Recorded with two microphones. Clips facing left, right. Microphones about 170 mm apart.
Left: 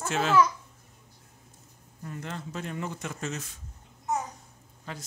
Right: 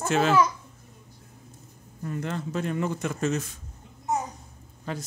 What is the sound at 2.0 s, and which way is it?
Speech, 60° right (ahead or behind).